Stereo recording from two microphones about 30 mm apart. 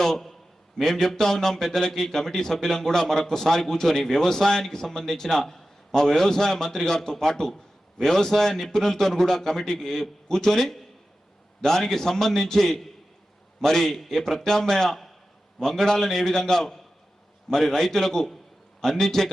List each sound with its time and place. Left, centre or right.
0.0 s a sound: centre
0.9 s speech: centre
11.8 s speech: centre
14.8 s a man's voice: centre
15.5 s speech: centre